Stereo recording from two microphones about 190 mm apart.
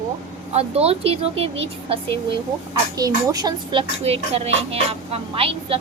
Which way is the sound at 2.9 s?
20° right (ahead or behind).